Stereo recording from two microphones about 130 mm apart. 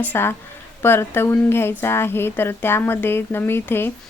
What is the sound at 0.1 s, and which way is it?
A woman's voice, 15° left (ahead or behind).